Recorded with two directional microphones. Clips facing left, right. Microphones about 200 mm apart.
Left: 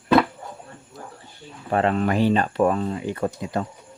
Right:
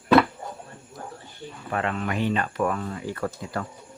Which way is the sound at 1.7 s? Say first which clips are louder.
Left 7 dB; 35° left (ahead or behind).